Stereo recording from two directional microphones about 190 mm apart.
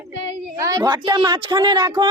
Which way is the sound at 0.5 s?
15° right (ahead or behind).